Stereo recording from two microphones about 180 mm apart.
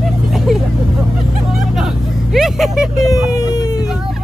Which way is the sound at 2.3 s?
Centre (ahead or behind).